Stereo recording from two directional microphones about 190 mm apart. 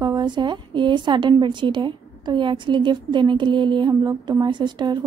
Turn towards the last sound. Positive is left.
turn(degrees=-25)  # may be behind; listen again after turning